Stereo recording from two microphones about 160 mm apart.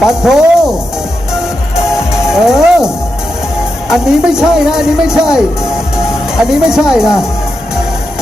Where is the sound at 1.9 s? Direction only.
5° right (ahead or behind).